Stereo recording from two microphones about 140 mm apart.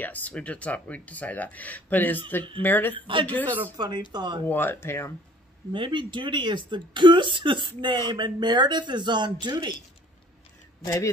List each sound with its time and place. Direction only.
0.0 s speech: 10° left (ahead or behind)
3.0 s speech: 35° right (ahead or behind)
3.3 s speech: 10° left (ahead or behind)
3.7 s speech: 30° right (ahead or behind)
4.5 s speech: 15° left (ahead or behind)
5.7 s speech: 35° right (ahead or behind)
10.8 s speech: 20° left (ahead or behind)